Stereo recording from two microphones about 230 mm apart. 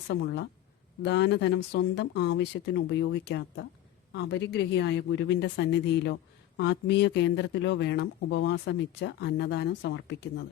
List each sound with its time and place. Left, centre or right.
0.1 s speech: left